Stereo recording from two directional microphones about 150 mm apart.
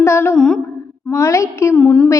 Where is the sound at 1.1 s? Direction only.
20° left (ahead or behind).